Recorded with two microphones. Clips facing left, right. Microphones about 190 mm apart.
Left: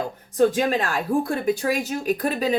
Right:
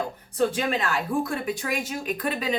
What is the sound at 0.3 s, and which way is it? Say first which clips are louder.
A woman's voice: left 5 dB; 40° left (ahead or behind).